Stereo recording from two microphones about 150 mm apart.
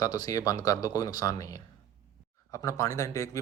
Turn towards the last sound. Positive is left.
turn(degrees=20)  # may be behind; listen again after turning